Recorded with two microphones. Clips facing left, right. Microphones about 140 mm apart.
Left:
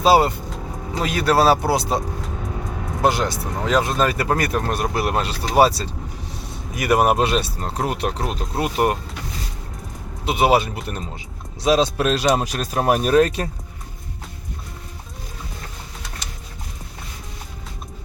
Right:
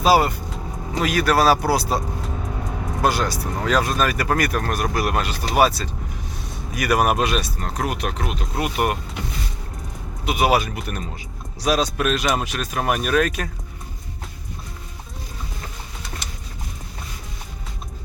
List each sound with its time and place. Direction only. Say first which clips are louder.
0.0 s speech: left 2 dB; 25° left (ahead or behind)
3.0 s speech: left 2 dB; 20° left (ahead or behind)
10.2 s speech: left 2 dB; 25° left (ahead or behind)